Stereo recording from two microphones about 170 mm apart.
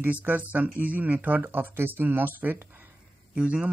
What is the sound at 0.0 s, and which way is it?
Speech, 10° right (ahead or behind).